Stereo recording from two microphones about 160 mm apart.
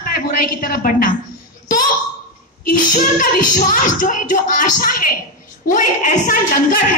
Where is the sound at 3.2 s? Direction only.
55° left (ahead or behind).